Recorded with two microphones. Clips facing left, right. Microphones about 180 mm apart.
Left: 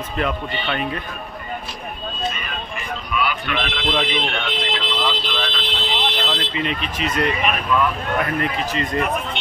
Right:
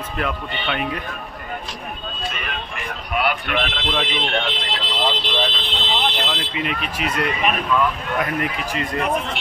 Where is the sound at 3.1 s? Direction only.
60° right (ahead or behind).